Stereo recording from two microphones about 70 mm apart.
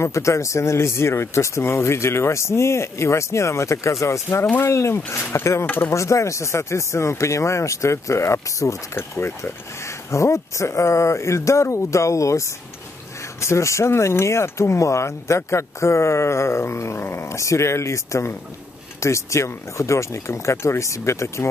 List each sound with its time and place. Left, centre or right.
0.0 s speech: left